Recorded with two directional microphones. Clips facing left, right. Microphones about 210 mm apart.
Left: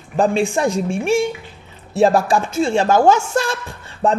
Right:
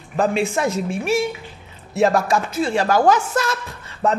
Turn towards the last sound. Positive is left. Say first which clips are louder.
# left 2 dB
turn(degrees=30)  # may be behind; listen again after turning